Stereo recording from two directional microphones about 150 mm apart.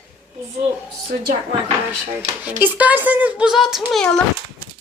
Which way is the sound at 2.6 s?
10° right (ahead or behind).